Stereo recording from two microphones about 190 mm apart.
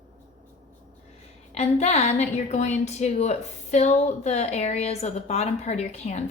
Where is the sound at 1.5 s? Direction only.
35° left (ahead or behind).